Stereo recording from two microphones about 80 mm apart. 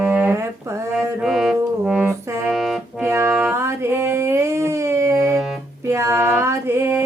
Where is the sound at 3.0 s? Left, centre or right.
Right.